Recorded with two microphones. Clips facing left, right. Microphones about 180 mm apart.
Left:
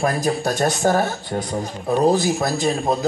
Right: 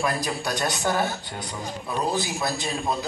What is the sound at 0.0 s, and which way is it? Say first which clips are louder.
Speech: left 6 dB; 45° left (ahead or behind).